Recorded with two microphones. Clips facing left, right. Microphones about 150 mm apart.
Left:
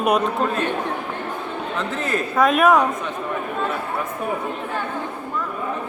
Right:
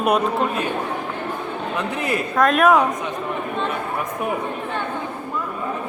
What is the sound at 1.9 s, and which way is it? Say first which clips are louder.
Speech: right 2 dB; 15° right (ahead or behind).